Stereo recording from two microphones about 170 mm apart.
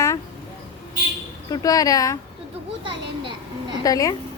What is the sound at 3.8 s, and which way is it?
Speech, 20° left (ahead or behind).